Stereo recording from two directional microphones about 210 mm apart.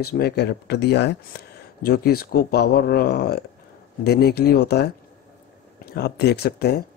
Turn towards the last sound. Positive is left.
turn(degrees=50)  # may be behind; listen again after turning